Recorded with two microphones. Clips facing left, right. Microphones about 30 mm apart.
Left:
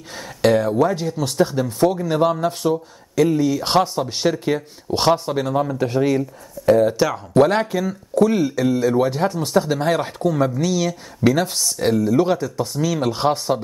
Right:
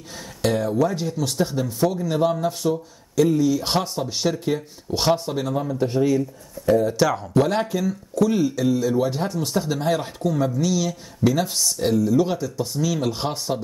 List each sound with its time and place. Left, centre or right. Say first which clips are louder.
0.4 s speech: left 5 dB; left
1.8 s speech: left 4 dB; left
3.8 s speech: left 5 dB; centre
4.1 s speech: left 3 dB; left
5.5 s speech: left 2 dB; left
7.5 s speech: left 2 dB; left
8.1 s speech: left 4 dB; left
8.5 s speech: left 3 dB; left
9.8 s speech: left 3 dB; left
10.6 s speech: left 2 dB; left
11.2 s speech: left 3 dB; left
12.4 s speech: left 2 dB; centre